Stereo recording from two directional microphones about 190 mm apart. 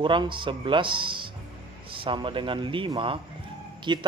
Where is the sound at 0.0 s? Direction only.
25° right (ahead or behind).